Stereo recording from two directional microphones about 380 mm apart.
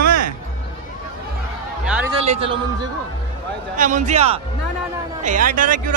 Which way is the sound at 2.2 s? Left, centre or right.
Centre.